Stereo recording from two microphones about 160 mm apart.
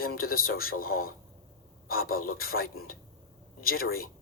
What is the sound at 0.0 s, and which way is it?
A man's voice, 65° left (ahead or behind).